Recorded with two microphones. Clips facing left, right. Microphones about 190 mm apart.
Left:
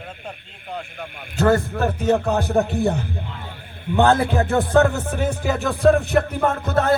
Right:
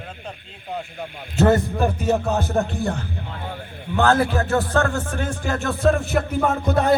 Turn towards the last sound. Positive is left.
turn(degrees=-15)  # may be behind; listen again after turning